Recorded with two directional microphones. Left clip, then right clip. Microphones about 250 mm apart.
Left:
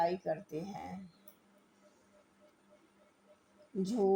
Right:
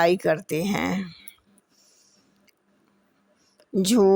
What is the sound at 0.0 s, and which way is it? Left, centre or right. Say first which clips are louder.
Speech: right 13 dB; right.